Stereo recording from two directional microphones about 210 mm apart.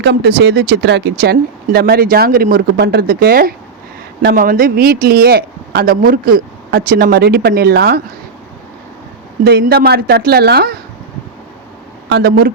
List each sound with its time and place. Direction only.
0.0 s speech: 50° right (ahead or behind)
9.4 s speech: 45° right (ahead or behind)
12.0 s speech: 50° right (ahead or behind)